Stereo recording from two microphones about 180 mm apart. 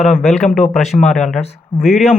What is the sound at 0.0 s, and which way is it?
Speech, centre (ahead or behind).